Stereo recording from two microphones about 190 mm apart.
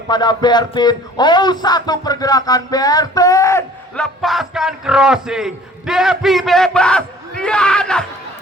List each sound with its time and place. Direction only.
0.1 s a man's voice: 20° left (ahead or behind)
3.9 s a man's voice: centre (ahead or behind)